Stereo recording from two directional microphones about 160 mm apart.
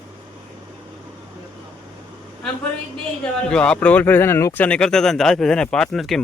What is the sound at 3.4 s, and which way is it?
Speech, 5° left (ahead or behind).